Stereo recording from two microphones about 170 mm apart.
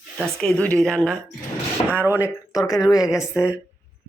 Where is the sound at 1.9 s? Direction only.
10° right (ahead or behind).